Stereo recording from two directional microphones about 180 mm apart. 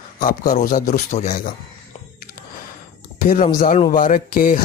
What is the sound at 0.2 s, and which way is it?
Speech, 50° left (ahead or behind).